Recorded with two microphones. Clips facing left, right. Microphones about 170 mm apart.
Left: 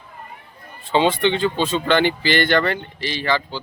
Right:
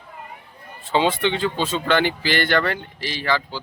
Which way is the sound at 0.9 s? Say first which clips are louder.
Left 2 dB; 5° right (ahead or behind).